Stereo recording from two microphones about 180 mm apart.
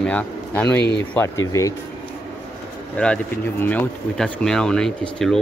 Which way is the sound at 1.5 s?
20° left (ahead or behind).